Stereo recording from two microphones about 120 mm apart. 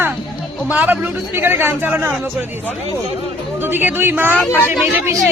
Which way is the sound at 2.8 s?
60° right (ahead or behind).